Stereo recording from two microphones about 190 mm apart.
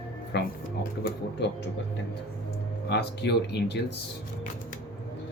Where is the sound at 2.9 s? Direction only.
60° left (ahead or behind).